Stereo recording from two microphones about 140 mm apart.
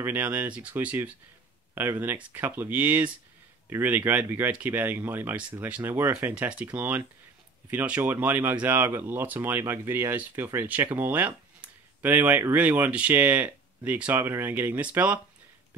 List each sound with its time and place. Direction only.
0.0 s speech: 15° right (ahead or behind)